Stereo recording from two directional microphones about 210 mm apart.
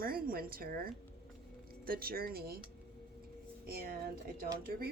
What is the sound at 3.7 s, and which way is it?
Speech, 45° right (ahead or behind).